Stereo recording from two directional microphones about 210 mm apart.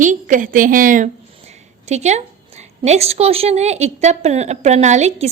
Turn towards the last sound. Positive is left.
turn(degrees=-35)  # may be behind; listen again after turning